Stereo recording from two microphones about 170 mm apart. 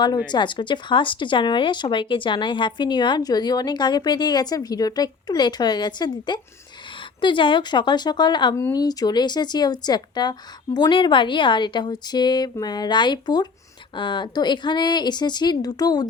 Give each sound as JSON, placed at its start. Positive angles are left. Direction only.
{"t": 0.3, "sound": "speech", "side_deg": 25}